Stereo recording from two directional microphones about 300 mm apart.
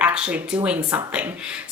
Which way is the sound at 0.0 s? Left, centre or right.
Centre.